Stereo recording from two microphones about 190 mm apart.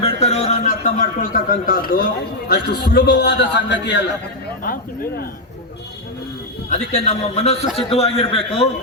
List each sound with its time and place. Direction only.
0.0 s a sound: 35° left (ahead or behind); by 2.0 s 50° left (ahead or behind)
2.5 s a man's voice: 60° left (ahead or behind)
4.6 s speech: 50° left (ahead or behind)
6.7 s a man's voice: 35° left (ahead or behind)